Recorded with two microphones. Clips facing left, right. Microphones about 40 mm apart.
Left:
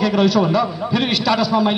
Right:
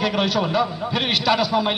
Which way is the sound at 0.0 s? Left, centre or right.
Centre.